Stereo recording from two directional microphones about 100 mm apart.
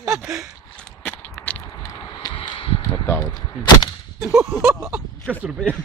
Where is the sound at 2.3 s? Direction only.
65° left (ahead or behind).